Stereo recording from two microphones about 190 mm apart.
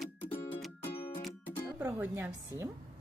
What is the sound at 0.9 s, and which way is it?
Music, 30° left (ahead or behind).